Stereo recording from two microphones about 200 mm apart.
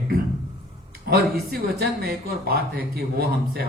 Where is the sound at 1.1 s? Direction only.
50° right (ahead or behind).